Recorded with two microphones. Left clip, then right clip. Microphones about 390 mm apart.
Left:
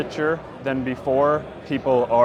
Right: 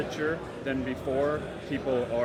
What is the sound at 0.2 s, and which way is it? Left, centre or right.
Speech, left.